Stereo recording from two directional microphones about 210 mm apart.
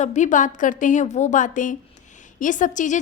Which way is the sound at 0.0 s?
35° left (ahead or behind).